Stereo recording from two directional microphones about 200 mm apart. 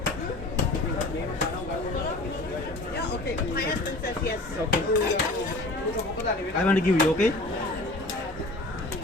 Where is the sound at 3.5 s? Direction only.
50° left (ahead or behind).